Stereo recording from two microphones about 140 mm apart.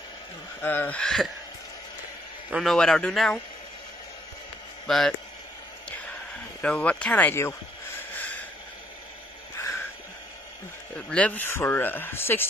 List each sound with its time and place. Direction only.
0.6 s speech: 15° left (ahead or behind)
2.5 s a man's voice: 5° left (ahead or behind)
4.8 s speech: centre (ahead or behind)
6.6 s speech: 10° left (ahead or behind)
9.6 s a sound: 20° left (ahead or behind)
11.0 s speech: 10° left (ahead or behind)